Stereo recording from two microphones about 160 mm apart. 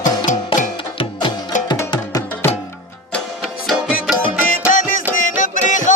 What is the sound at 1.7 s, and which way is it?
Music, 25° left (ahead or behind).